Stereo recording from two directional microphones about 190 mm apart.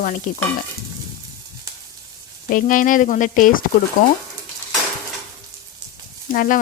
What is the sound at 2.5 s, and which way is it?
Speech, 45° left (ahead or behind).